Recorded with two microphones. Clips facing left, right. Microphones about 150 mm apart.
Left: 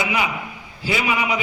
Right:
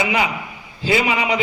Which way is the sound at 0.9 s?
25° right (ahead or behind).